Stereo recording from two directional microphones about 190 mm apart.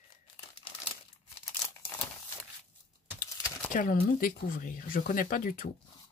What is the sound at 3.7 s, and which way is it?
Speech, 45° left (ahead or behind).